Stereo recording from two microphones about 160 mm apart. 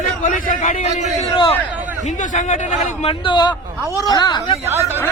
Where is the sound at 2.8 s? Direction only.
35° left (ahead or behind).